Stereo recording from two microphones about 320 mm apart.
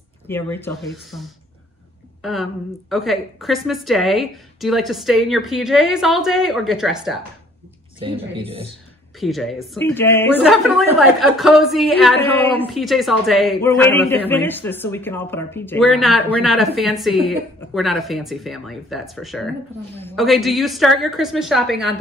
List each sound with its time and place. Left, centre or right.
0.3 s speech: centre
2.2 s a woman's voice: centre
8.0 s speech: centre
9.2 s a woman's voice: centre